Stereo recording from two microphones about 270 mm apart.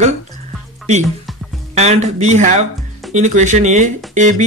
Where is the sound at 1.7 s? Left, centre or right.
Right.